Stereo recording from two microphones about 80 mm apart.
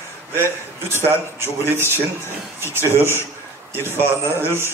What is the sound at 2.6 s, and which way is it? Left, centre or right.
Speech, left.